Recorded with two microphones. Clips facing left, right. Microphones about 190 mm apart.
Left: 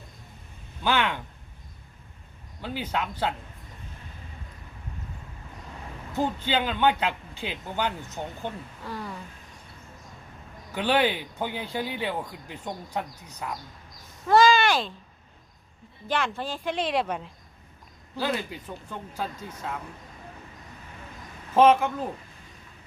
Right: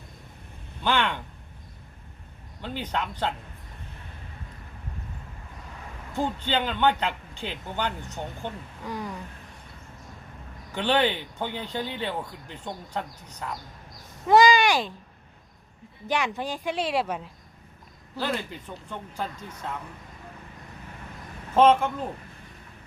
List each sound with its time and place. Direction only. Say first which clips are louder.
0.9 s a sound: even; 5° left (ahead or behind)
2.6 s speech: left 1 dB; 10° left (ahead or behind)
6.1 s speech: left 1 dB; 10° left (ahead or behind)
8.8 s speech: right 3 dB; 15° right (ahead or behind)
10.8 s speech: even; 10° left (ahead or behind)
14.3 s speech: right 1 dB; 15° right (ahead or behind)
16.0 s speech: right 1 dB; 15° right (ahead or behind)
18.2 s speech: left 1 dB; 10° left (ahead or behind)
21.5 s speech: even; 10° left (ahead or behind)